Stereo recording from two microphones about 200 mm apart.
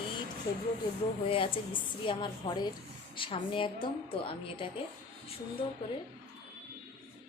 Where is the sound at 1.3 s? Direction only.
25° left (ahead or behind).